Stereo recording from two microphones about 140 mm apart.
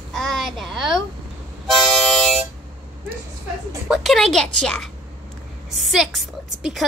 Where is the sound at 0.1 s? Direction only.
5° left (ahead or behind).